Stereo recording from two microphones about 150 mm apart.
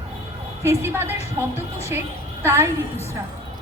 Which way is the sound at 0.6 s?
15° right (ahead or behind).